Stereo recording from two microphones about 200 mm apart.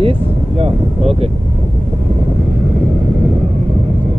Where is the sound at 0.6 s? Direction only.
30° right (ahead or behind).